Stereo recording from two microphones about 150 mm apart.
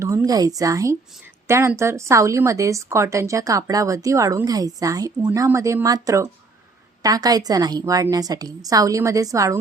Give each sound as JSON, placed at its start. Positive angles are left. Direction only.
{"t": 0.0, "sound": "a woman's voice", "side_deg": -20}